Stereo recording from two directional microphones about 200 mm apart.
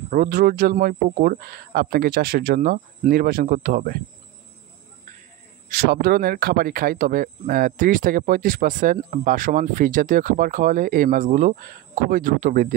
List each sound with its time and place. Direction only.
0.1 s speech: 45° right (ahead or behind)
5.7 s speech: 45° right (ahead or behind)